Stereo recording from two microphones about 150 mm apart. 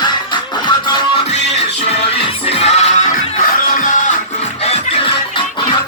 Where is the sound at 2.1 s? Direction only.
40° left (ahead or behind).